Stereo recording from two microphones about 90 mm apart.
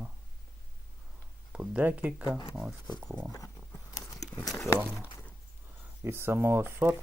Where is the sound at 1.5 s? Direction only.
15° right (ahead or behind).